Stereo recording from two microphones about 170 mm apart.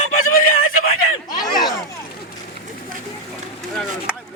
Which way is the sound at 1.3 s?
25° left (ahead or behind).